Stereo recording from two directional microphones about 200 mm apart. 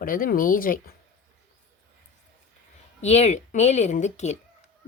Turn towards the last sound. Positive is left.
turn(degrees=35)  # may be behind; listen again after turning